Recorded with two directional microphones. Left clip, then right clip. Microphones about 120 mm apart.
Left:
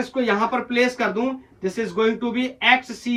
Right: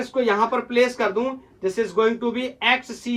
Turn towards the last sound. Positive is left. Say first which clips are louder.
# left 3 dB
turn(degrees=-25)  # may be behind; listen again after turning